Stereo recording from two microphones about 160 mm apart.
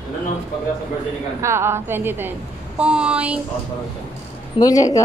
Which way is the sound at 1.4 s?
15° right (ahead or behind).